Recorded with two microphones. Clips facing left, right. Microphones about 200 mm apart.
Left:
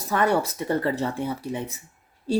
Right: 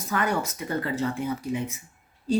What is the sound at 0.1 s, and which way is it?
A woman's voice, 35° left (ahead or behind).